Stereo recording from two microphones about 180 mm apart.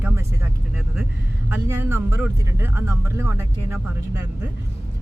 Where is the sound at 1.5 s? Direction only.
10° right (ahead or behind).